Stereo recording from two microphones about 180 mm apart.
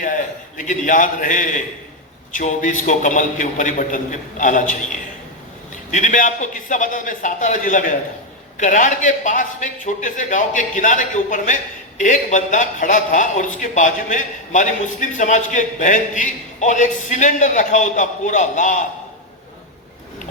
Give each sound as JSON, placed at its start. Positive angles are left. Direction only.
{"t": 0.0, "sound": "a man's voice", "side_deg": 45}
{"t": 5.9, "sound": "a man's voice", "side_deg": 45}